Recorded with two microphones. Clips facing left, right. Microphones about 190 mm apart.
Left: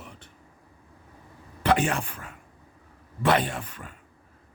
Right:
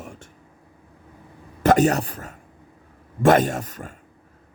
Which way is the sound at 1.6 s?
45° right (ahead or behind).